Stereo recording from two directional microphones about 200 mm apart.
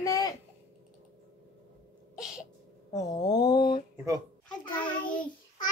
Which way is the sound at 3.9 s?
15° right (ahead or behind).